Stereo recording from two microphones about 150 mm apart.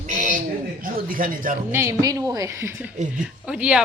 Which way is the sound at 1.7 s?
20° right (ahead or behind).